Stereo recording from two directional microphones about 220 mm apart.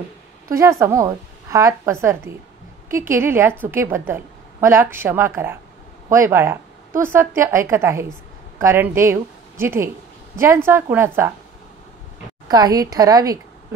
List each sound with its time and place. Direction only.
0.5 s a woman's voice: 15° right (ahead or behind)
12.4 s a woman's voice: 15° right (ahead or behind)